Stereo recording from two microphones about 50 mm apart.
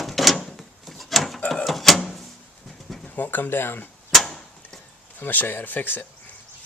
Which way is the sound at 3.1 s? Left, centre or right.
Left.